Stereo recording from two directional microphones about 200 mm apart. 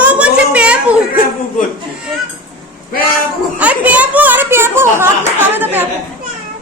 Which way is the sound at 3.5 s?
10° right (ahead or behind).